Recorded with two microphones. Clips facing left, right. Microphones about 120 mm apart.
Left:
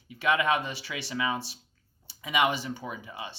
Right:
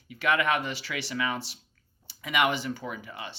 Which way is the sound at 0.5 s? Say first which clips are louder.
Even; 70° right (ahead or behind).